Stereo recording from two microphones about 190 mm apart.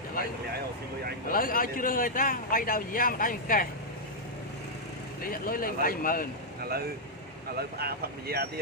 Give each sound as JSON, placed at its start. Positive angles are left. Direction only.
{"t": 1.3, "sound": "speech", "side_deg": 50}
{"t": 5.2, "sound": "speech", "side_deg": 50}
{"t": 6.6, "sound": "speech", "side_deg": -55}